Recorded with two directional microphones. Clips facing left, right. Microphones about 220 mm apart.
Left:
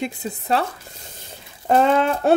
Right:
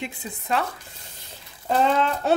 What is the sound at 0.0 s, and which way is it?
Speech, 40° left (ahead or behind).